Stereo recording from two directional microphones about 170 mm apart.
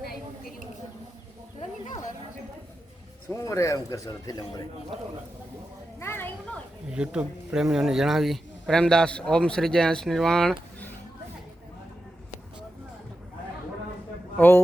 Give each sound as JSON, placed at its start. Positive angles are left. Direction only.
{"t": 3.2, "sound": "a man's voice", "side_deg": 15}
{"t": 6.0, "sound": "a sound", "side_deg": 15}
{"t": 6.8, "sound": "speech", "side_deg": -5}
{"t": 14.3, "sound": "a man's voice", "side_deg": 15}